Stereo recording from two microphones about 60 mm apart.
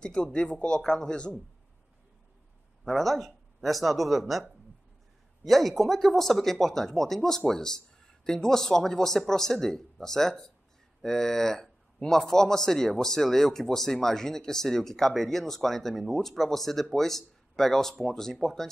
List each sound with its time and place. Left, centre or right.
0.0 s speech: centre
2.8 s speech: centre